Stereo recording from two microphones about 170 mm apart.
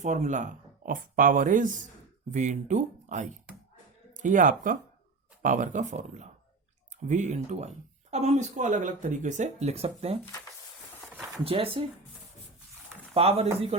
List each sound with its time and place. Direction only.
0.0 s speech: 45° right (ahead or behind)
11.1 s a sound: centre (ahead or behind)
11.4 s speech: 35° right (ahead or behind)
13.1 s speech: 35° right (ahead or behind)